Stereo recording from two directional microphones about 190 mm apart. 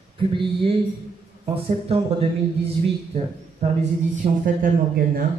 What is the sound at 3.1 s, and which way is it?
Speech, 35° right (ahead or behind).